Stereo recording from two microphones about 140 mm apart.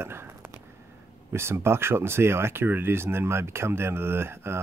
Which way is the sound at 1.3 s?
15° right (ahead or behind).